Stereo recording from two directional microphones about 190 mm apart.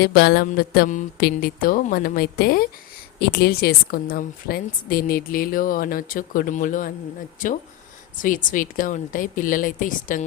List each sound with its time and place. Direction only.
0.0 s a woman's voice: 55° left (ahead or behind)